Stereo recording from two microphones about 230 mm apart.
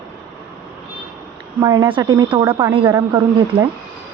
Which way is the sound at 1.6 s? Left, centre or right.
Centre.